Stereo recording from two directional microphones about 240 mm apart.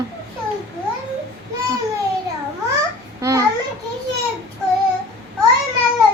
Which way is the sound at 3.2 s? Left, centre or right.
Centre.